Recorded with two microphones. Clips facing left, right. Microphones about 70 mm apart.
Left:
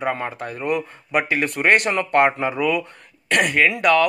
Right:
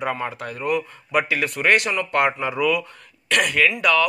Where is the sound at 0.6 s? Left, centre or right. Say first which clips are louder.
Even; left.